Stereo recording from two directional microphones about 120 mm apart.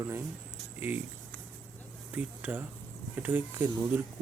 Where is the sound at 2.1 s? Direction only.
15° right (ahead or behind).